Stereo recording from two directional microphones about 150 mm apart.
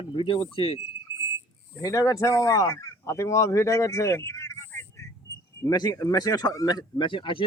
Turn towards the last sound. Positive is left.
turn(degrees=35)  # may be behind; listen again after turning